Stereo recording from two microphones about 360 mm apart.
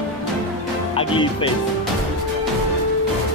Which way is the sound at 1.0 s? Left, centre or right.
Centre.